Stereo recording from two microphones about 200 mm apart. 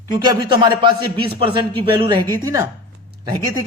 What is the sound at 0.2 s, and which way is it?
A man's voice, 20° right (ahead or behind).